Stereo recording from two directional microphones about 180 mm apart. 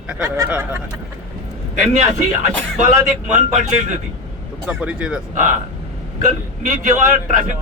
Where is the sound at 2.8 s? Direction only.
40° right (ahead or behind).